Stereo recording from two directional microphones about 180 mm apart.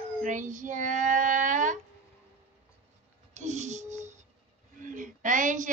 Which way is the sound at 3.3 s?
40° right (ahead or behind).